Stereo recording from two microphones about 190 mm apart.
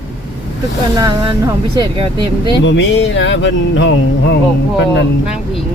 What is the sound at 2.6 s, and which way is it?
Speech, 70° left (ahead or behind).